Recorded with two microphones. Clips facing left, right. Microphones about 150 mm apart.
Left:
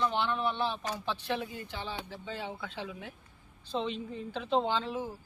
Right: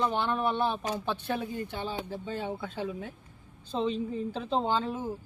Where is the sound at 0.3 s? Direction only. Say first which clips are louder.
Right 3 dB; 45° right (ahead or behind).